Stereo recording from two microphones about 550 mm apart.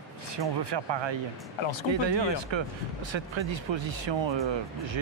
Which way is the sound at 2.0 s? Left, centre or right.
Right.